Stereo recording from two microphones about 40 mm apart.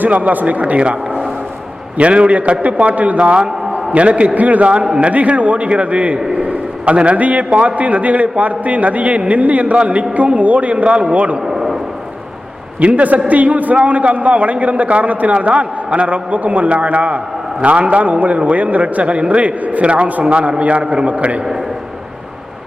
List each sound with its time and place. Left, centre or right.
0.0 s a man's voice: right
3.3 s a sound: right
4.4 s a man's voice: right
4.7 s a man's voice: right
11.4 s a sound: centre
12.8 s a man's voice: right